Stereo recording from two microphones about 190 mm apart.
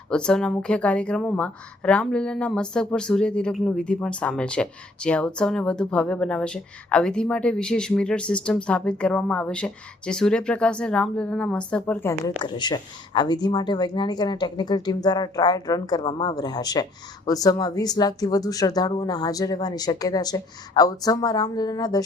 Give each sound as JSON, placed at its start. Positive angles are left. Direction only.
{"t": 0.1, "sound": "speech", "side_deg": 5}
{"t": 12.4, "sound": "speech", "side_deg": 25}